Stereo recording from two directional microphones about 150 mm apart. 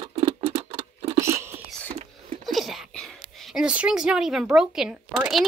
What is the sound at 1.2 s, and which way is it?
Biting, 15° right (ahead or behind).